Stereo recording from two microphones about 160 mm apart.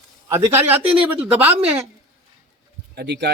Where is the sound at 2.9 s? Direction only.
90° right.